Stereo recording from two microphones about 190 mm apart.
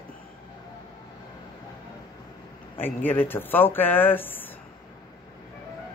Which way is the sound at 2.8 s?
10° left (ahead or behind).